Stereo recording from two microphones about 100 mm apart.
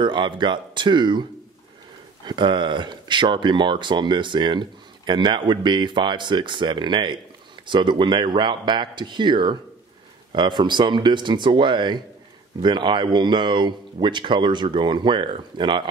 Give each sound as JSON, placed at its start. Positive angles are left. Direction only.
{"t": 0.0, "sound": "speech", "side_deg": -55}
{"t": 2.2, "sound": "speech", "side_deg": -50}